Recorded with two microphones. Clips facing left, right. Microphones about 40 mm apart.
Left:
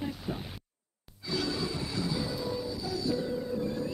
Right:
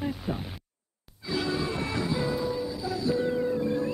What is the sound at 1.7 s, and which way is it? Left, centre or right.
Music, right.